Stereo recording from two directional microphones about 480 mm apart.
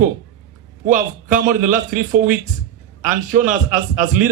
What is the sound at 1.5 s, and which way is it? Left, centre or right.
A man's voice, centre.